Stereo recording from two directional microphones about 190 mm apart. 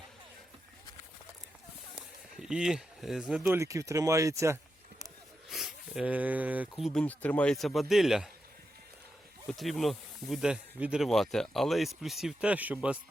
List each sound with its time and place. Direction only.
2.4 s speech: 5° right (ahead or behind)
3.6 s speech: 15° right (ahead or behind)
5.5 s speech: centre (ahead or behind)
9.5 s speech: centre (ahead or behind)